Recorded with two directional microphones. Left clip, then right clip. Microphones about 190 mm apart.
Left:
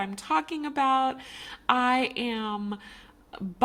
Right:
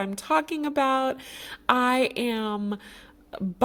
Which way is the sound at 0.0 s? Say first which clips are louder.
Right 3 dB; 40° right (ahead or behind).